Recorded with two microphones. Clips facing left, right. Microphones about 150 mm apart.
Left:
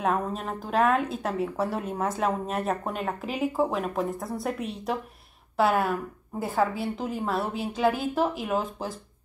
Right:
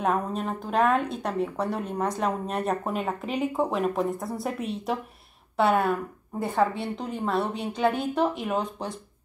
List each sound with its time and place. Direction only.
0.0 s a woman's voice: centre (ahead or behind)